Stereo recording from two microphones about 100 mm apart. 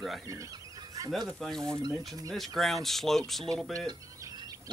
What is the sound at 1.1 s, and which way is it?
Speech, 5° left (ahead or behind).